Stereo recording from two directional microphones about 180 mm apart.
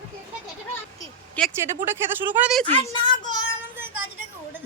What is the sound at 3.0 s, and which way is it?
Child singing, 25° left (ahead or behind).